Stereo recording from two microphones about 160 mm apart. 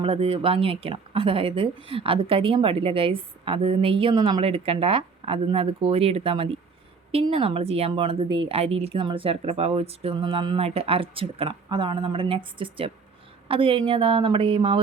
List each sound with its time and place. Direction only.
0.0 s speech: 40° right (ahead or behind)